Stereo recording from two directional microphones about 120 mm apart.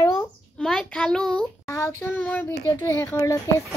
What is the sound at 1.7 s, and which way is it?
A child's voice, 20° left (ahead or behind).